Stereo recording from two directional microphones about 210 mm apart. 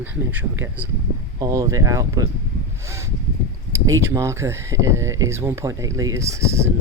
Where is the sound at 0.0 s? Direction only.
10° right (ahead or behind).